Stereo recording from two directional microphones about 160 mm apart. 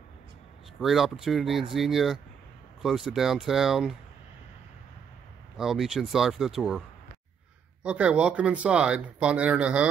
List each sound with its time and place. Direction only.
0.7 s speech: centre (ahead or behind)
5.6 s speech: centre (ahead or behind)
7.8 s speech: 5° right (ahead or behind)